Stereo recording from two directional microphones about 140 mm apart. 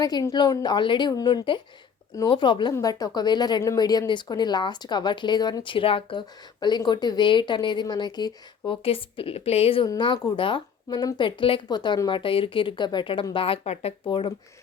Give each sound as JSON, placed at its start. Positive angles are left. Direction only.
{"t": 0.0, "sound": "a woman's voice", "side_deg": 25}